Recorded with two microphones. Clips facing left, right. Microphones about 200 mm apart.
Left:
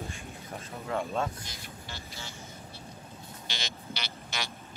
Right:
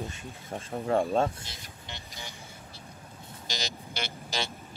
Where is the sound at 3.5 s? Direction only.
40° right (ahead or behind).